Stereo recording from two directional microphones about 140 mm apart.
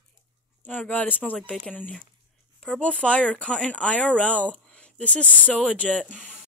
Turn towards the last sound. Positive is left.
turn(degrees=10)  # may be behind; listen again after turning